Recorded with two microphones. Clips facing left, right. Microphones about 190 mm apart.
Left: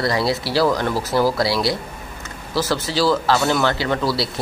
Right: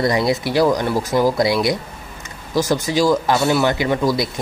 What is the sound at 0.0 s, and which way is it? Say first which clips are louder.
Speech: right 3 dB; 20° right (ahead or behind).